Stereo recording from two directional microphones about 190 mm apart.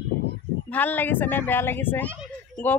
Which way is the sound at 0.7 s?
10° left (ahead or behind).